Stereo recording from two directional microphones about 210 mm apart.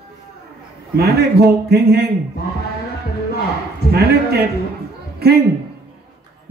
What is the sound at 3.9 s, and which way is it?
Speech, 50° right (ahead or behind).